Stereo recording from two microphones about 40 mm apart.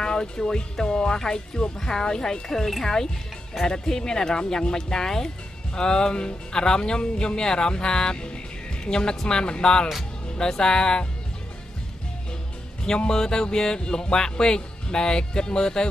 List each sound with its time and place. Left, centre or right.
0.0 s speech: centre
12.8 s speech: centre